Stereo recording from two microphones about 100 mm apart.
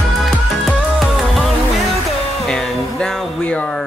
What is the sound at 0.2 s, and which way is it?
Music, centre (ahead or behind).